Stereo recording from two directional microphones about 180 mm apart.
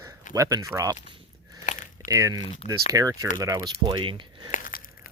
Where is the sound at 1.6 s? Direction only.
45° left (ahead or behind).